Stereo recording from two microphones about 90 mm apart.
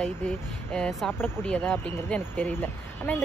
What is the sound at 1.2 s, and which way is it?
Speech, 20° left (ahead or behind).